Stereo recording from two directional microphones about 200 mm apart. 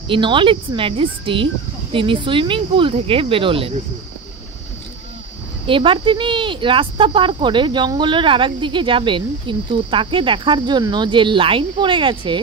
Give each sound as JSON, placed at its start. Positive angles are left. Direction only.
{"t": 0.1, "sound": "speech", "side_deg": -25}
{"t": 5.7, "sound": "speech", "side_deg": -25}